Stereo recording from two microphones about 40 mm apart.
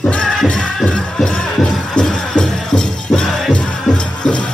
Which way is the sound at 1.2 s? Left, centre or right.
Centre.